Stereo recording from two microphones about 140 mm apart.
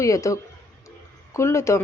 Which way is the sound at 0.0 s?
25° left (ahead or behind).